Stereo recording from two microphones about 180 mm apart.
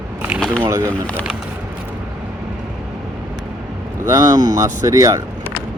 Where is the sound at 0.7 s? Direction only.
15° right (ahead or behind).